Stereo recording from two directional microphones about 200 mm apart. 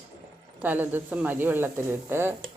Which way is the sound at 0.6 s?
10° right (ahead or behind).